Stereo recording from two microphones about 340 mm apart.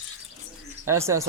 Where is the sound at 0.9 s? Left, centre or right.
Centre.